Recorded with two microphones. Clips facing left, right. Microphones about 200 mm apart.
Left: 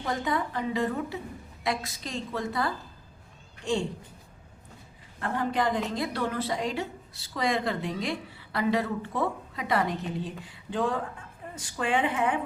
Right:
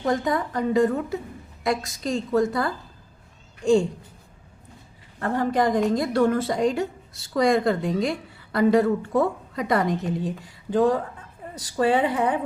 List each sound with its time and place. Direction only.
0.0 s a woman's voice: 45° right (ahead or behind)
5.2 s a woman's voice: 45° right (ahead or behind)